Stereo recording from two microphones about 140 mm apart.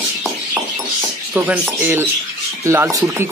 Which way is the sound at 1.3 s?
10° right (ahead or behind).